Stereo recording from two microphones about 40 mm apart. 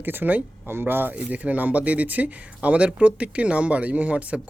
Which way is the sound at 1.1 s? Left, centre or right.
Right.